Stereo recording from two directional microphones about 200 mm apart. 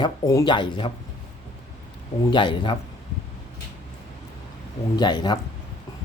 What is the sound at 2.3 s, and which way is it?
Speech, 25° left (ahead or behind).